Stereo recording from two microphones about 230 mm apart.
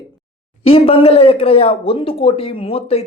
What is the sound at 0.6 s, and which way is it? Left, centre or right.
Speech, left.